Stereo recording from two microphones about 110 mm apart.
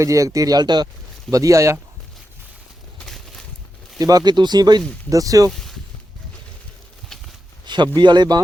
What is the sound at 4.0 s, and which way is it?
Speech, 35° right (ahead or behind).